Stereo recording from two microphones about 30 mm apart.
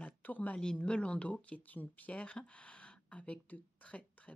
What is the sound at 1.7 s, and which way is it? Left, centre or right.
Speech, left.